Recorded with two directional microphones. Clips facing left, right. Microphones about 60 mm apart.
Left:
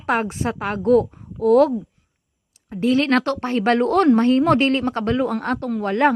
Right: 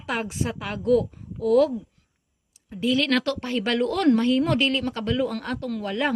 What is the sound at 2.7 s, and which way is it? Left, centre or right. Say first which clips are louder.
A woman's voice: left 5 dB; left.